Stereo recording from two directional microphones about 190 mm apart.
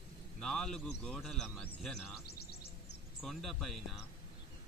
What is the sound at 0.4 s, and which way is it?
Speech, 5° left (ahead or behind).